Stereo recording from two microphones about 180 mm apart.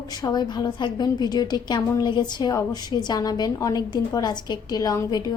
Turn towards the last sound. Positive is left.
turn(degrees=20)  # may be behind; listen again after turning